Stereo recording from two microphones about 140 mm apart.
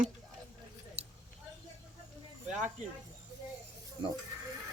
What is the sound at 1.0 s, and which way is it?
Keys jangling, 50° right (ahead or behind).